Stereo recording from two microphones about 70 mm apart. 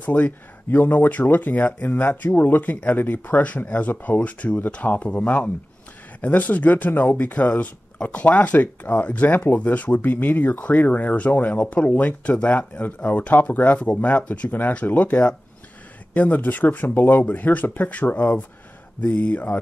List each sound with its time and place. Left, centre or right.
0.0 s speech: left